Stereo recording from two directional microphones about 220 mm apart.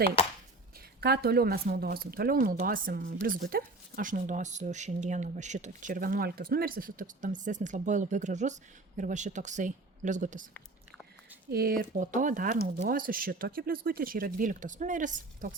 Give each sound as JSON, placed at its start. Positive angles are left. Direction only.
{"t": 0.2, "sound": "a sound", "side_deg": 25}
{"t": 1.0, "sound": "speech", "side_deg": -45}
{"t": 11.5, "sound": "speech", "side_deg": -40}